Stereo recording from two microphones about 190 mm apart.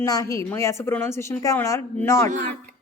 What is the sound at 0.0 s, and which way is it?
A woman's voice, 15° left (ahead or behind).